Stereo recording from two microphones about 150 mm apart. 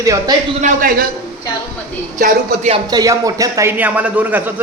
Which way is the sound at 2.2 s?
60° right (ahead or behind).